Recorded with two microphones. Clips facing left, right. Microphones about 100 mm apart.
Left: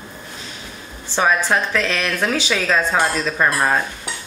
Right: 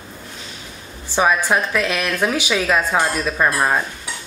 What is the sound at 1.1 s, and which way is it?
A woman's voice, 15° right (ahead or behind).